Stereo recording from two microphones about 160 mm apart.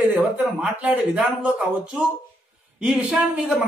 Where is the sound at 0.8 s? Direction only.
10° right (ahead or behind).